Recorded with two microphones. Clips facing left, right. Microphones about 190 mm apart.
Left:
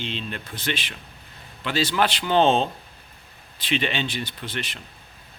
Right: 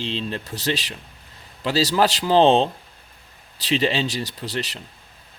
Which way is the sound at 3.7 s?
35° right (ahead or behind).